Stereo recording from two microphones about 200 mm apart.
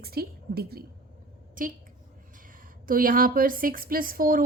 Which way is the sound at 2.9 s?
45° right (ahead or behind).